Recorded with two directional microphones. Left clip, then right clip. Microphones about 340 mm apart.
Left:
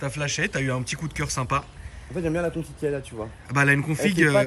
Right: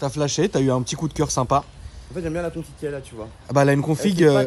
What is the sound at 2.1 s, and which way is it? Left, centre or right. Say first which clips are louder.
Speech: left 1 dB; left.